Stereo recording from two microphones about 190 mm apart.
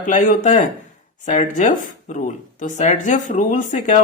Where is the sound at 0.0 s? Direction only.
45° left (ahead or behind).